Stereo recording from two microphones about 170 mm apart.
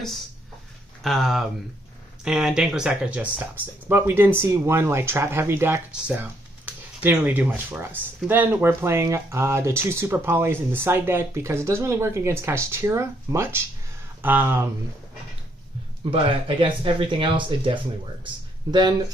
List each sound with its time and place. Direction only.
1.0 s speech: centre (ahead or behind)
16.1 s speech: 30° right (ahead or behind)